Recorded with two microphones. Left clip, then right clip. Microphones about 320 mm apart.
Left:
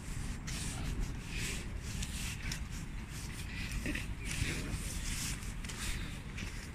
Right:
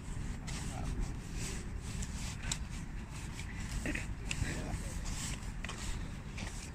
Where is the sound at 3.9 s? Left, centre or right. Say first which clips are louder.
Right 1 dB; right.